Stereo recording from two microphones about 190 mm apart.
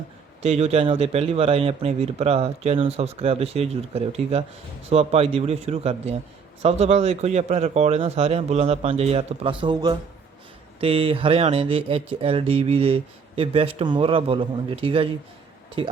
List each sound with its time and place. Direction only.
0.4 s speech: 35° right (ahead or behind)